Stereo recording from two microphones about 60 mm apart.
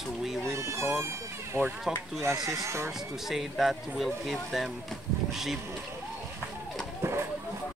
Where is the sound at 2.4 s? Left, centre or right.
Right.